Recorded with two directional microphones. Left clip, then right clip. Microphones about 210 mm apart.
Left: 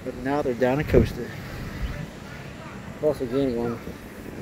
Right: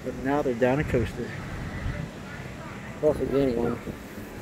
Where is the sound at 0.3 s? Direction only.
10° left (ahead or behind).